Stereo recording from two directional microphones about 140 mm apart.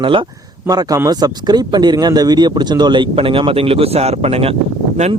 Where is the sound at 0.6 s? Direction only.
25° right (ahead or behind); by 4.5 s 45° right (ahead or behind).